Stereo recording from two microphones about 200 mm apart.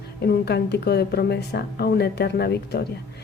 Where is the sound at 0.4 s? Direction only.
55° left (ahead or behind).